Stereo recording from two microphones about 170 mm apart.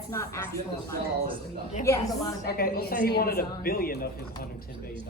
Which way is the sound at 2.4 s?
65° left (ahead or behind).